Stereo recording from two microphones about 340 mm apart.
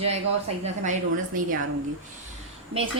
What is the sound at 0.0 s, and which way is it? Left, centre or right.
A woman's voice, centre.